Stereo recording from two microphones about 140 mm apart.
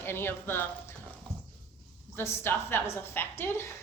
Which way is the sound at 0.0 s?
15° left (ahead or behind).